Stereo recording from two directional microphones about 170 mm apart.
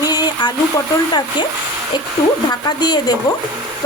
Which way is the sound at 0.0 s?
25° left (ahead or behind).